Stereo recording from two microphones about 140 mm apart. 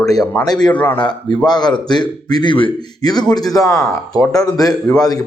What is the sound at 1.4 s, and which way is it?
A man's voice, 30° left (ahead or behind).